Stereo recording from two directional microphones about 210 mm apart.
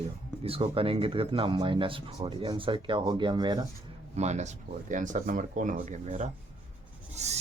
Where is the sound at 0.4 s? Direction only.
25° right (ahead or behind).